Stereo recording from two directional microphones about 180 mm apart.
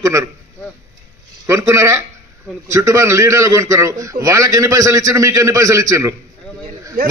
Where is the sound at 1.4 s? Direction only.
15° right (ahead or behind).